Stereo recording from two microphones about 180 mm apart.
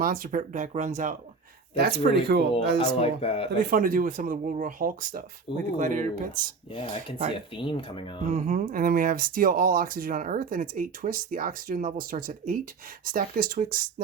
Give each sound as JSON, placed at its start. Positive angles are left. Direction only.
{"t": 0.0, "sound": "speech", "side_deg": -50}
{"t": 1.7, "sound": "speech", "side_deg": -60}
{"t": 2.6, "sound": "speech", "side_deg": 30}
{"t": 3.7, "sound": "speech", "side_deg": -50}
{"t": 5.5, "sound": "speech", "side_deg": 30}
{"t": 5.8, "sound": "speech", "side_deg": -45}
{"t": 6.7, "sound": "speech", "side_deg": 30}
{"t": 8.3, "sound": "speech", "side_deg": -45}